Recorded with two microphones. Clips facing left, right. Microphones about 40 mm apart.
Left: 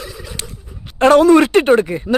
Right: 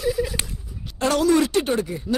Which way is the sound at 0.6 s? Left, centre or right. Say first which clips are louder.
Left 13 dB; left.